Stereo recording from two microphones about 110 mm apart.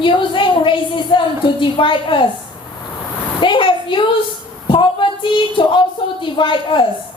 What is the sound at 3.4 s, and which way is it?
Speech, 50° left (ahead or behind).